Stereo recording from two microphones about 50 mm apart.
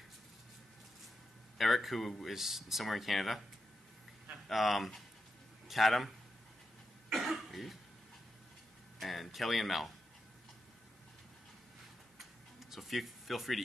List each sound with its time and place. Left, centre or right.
1.6 s speech: centre
4.5 s speech: centre
7.1 s cough: centre
9.0 s speech: centre
12.2 s tick-tock: centre